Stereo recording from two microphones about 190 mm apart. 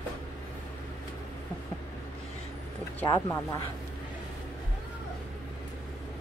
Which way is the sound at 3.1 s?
20° left (ahead or behind).